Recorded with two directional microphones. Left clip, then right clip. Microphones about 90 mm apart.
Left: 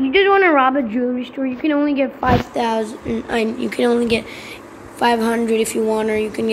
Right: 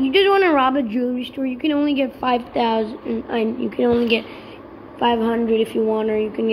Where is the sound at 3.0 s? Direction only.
40° left (ahead or behind).